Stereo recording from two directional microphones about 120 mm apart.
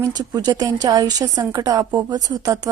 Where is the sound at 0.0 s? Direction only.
30° right (ahead or behind).